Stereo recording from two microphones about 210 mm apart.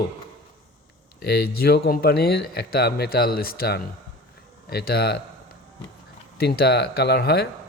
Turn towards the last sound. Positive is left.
turn(degrees=50)  # may be behind; listen again after turning